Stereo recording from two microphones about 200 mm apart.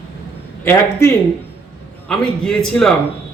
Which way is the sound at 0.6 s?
10° left (ahead or behind).